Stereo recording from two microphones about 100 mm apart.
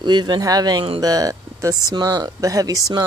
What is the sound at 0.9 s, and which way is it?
Speech, 35° right (ahead or behind).